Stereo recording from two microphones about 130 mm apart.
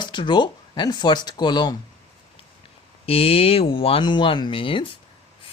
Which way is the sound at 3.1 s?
50° left (ahead or behind).